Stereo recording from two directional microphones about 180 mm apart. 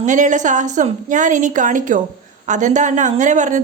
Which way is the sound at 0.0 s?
45° right (ahead or behind).